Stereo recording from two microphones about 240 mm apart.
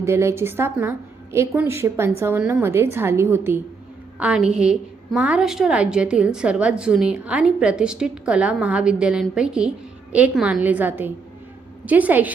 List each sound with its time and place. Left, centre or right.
0.0 s a woman's voice: centre